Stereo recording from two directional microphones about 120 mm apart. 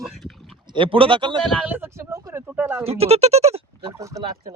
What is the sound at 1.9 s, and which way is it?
Speech, 25° right (ahead or behind).